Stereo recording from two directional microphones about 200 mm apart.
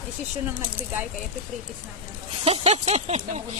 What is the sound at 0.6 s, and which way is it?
Speech, 10° right (ahead or behind).